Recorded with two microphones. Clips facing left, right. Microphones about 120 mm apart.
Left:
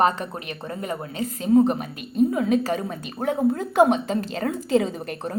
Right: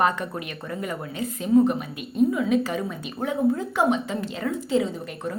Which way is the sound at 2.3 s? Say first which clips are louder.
Left 1 dB; 45° left (ahead or behind).